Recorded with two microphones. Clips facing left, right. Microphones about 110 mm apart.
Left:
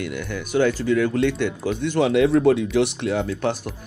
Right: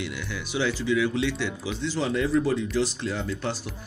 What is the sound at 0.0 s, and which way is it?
Speech, 50° left (ahead or behind).